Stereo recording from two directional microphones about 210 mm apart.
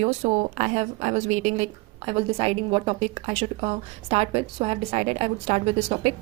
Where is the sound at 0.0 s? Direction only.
35° right (ahead or behind).